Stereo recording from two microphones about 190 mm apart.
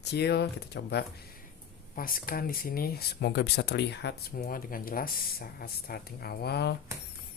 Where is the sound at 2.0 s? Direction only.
50° left (ahead or behind).